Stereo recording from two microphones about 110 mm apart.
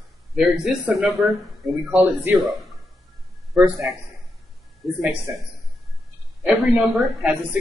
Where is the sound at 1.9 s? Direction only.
15° right (ahead or behind).